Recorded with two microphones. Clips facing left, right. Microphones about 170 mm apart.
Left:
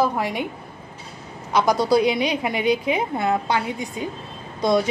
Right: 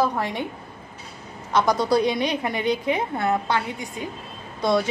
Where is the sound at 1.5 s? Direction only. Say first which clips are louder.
Left 2 dB; 10° left (ahead or behind).